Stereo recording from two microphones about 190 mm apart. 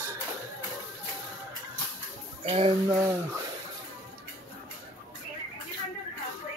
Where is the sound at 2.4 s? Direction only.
30° right (ahead or behind).